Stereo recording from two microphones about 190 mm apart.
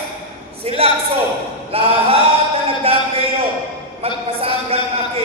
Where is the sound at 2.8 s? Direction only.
30° right (ahead or behind).